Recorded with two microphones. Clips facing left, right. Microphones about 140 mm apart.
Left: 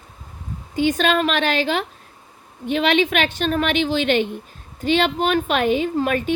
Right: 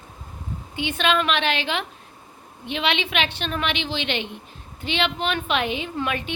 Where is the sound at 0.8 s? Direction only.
40° left (ahead or behind).